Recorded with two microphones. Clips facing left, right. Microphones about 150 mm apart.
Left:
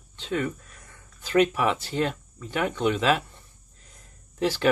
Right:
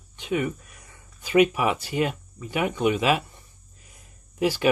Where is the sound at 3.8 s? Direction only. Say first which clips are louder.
Left 1 dB; 10° right (ahead or behind).